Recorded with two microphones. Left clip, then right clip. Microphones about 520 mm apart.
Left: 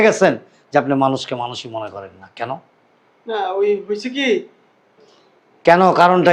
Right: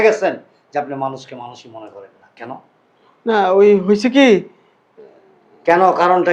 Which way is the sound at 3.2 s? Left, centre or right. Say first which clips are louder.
Right 7 dB; right.